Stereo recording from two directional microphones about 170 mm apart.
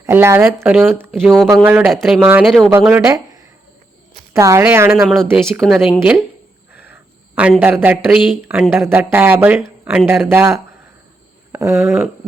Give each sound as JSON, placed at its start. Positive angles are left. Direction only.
{"t": 0.0, "sound": "speech", "side_deg": -15}
{"t": 1.9, "sound": "speech", "side_deg": 0}
{"t": 2.8, "sound": "speech", "side_deg": -15}
{"t": 5.0, "sound": "speech", "side_deg": 0}
{"t": 5.3, "sound": "speech", "side_deg": -10}
{"t": 7.3, "sound": "speech", "side_deg": -5}